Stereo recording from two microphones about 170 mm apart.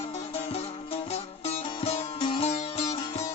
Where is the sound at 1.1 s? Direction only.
35° left (ahead or behind).